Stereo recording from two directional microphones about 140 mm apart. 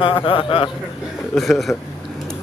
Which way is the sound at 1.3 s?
Centre (ahead or behind).